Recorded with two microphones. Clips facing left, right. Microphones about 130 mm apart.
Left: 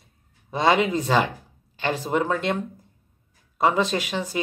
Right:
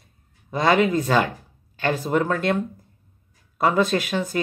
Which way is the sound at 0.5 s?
25° left (ahead or behind).